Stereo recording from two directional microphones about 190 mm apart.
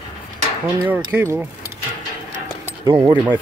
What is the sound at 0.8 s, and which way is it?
Speech, 10° right (ahead or behind).